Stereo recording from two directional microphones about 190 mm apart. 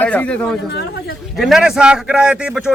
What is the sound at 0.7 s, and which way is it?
Speech, 60° left (ahead or behind).